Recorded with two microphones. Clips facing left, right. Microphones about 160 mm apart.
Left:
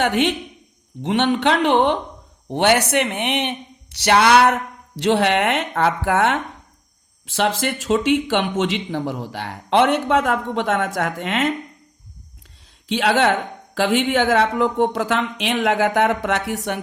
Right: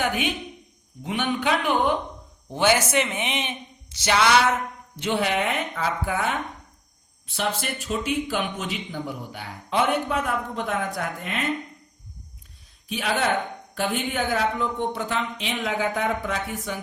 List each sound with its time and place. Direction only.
0.0 s speech: 80° left
2.5 s speech: 70° left (ahead or behind)
12.9 s speech: 80° left